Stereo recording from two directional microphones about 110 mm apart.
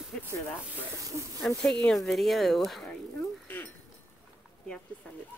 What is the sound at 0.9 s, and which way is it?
Speech, 30° right (ahead or behind).